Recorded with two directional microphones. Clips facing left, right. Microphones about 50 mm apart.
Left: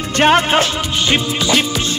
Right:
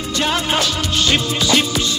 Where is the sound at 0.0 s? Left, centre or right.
Left.